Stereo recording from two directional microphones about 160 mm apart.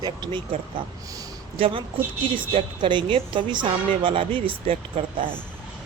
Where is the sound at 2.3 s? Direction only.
30° right (ahead or behind).